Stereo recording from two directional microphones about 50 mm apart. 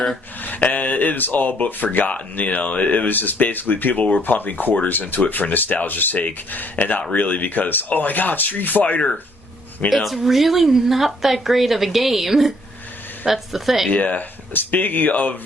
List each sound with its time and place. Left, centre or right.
0.4 s speech: left
9.9 s speech: centre
13.9 s speech: left